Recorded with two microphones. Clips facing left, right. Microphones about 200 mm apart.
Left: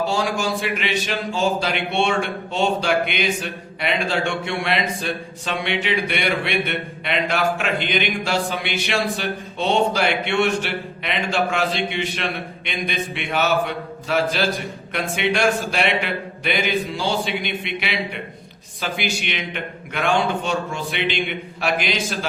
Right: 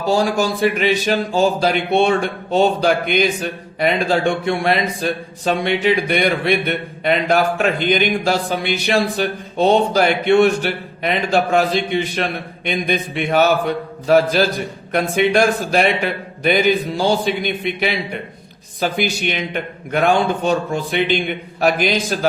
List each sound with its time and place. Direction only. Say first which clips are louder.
0.1 s a man's voice: right 5 dB; 40° right (ahead or behind)